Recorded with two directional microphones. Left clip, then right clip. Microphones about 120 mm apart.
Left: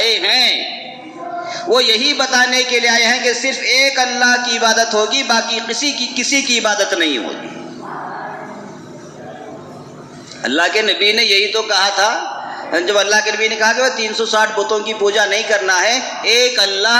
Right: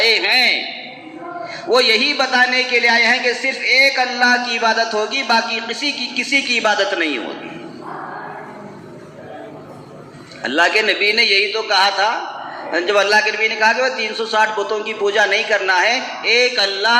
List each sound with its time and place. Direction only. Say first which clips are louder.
0.0 s a sound: even; 30° left (ahead or behind)
1.7 s a man's voice: left 1 dB; 30° left (ahead or behind)
10.4 s a man's voice: even; 30° left (ahead or behind)